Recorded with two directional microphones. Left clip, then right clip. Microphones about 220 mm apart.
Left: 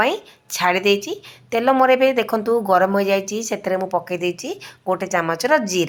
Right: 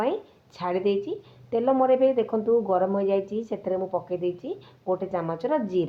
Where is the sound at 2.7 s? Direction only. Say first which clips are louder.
Left 7 dB; 15° left (ahead or behind).